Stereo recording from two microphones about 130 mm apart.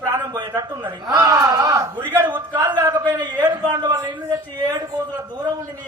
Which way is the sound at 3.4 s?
20° right (ahead or behind).